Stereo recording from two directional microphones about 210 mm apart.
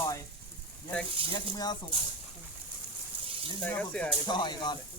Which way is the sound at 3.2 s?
25° right (ahead or behind).